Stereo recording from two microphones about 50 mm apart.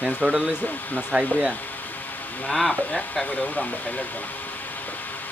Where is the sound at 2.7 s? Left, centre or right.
Centre.